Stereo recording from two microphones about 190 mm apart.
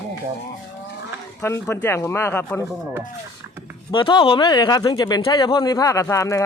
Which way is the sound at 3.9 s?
25° left (ahead or behind).